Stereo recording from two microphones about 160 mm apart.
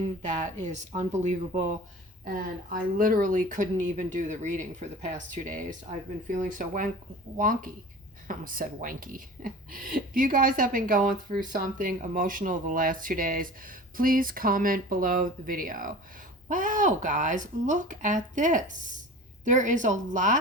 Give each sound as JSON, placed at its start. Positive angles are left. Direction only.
{"t": 0.2, "sound": "speech", "side_deg": -50}
{"t": 2.2, "sound": "speech", "side_deg": -60}